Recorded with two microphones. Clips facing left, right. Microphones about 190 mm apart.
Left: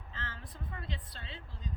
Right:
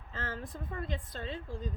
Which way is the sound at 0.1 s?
45° right (ahead or behind).